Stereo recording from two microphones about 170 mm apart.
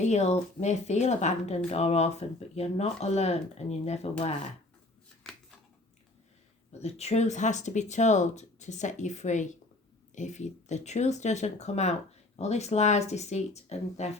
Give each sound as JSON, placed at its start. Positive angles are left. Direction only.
{"t": 0.0, "sound": "speech", "side_deg": 40}
{"t": 6.8, "sound": "speech", "side_deg": 40}